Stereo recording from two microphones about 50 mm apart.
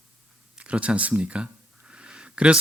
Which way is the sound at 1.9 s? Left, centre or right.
Right.